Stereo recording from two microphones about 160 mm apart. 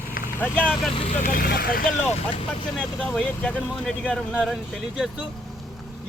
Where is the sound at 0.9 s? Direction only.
40° left (ahead or behind).